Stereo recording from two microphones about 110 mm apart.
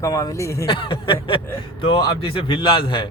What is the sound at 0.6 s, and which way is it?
A man's voice, 50° left (ahead or behind).